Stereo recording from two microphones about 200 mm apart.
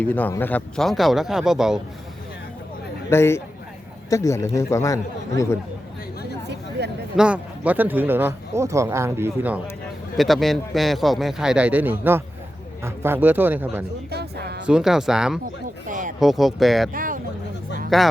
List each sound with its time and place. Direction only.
0.0 s a man's voice: 10° left (ahead or behind)
3.1 s speech: 15° left (ahead or behind)
6.5 s a sound: 60° right (ahead or behind)
7.2 s speech: 5° right (ahead or behind)
10.2 s a man's voice: centre (ahead or behind)
14.1 s speech: 55° right (ahead or behind)
14.7 s a man's voice: centre (ahead or behind)
15.9 s a sound: 40° right (ahead or behind)
16.2 s a man's voice: centre (ahead or behind)
16.9 s speech: 45° right (ahead or behind)
17.9 s a man's voice: centre (ahead or behind)